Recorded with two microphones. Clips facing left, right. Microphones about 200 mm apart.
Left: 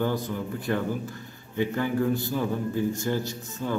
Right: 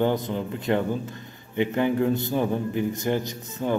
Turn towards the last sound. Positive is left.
turn(degrees=-20)  # may be behind; listen again after turning